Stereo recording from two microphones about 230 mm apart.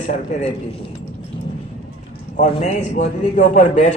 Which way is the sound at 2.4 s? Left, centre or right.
Left.